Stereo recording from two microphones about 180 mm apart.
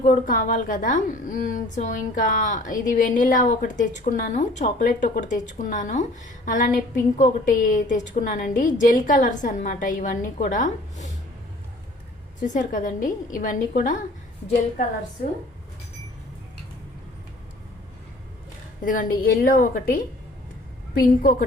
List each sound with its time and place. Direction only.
0.0 s a woman's voice: 45° left (ahead or behind)
12.4 s a woman's voice: 45° left (ahead or behind)
18.8 s a woman's voice: 50° left (ahead or behind)
21.0 s a woman's voice: 50° left (ahead or behind)